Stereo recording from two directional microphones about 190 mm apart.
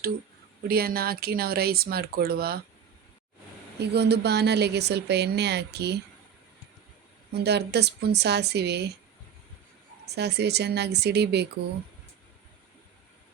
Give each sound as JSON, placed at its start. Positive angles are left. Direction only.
{"t": 0.7, "sound": "speech", "side_deg": -50}
{"t": 3.8, "sound": "speech", "side_deg": -60}
{"t": 7.3, "sound": "speech", "side_deg": -60}
{"t": 10.1, "sound": "speech", "side_deg": -60}